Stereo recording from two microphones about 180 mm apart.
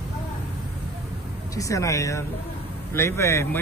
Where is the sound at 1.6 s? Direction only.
20° left (ahead or behind).